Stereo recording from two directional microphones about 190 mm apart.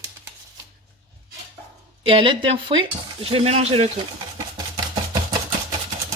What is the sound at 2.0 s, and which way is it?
Speech, 30° right (ahead or behind).